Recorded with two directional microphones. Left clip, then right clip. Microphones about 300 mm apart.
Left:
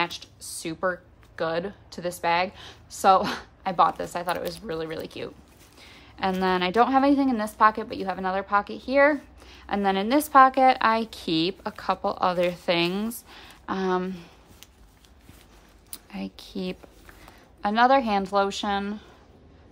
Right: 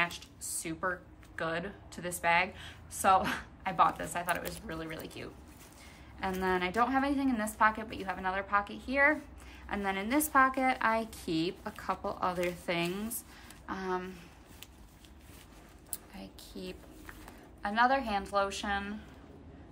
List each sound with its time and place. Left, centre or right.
0.0 s a woman's voice: centre
16.1 s a woman's voice: centre